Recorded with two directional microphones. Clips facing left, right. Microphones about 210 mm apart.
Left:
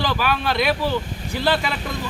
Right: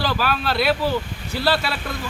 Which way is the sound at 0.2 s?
15° left (ahead or behind).